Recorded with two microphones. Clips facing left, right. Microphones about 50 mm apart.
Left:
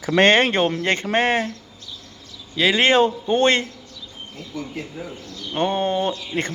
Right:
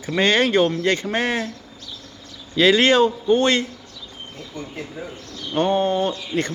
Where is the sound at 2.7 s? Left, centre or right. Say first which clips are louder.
Right 1 dB; left.